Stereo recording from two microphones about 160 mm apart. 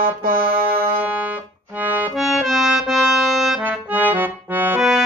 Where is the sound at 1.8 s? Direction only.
10° right (ahead or behind).